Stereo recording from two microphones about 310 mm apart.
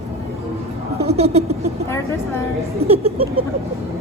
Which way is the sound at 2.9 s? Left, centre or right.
Centre.